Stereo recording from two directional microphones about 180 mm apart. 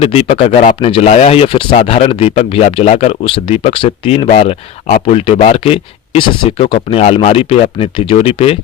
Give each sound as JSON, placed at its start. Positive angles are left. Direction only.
{"t": 0.0, "sound": "speech", "side_deg": 30}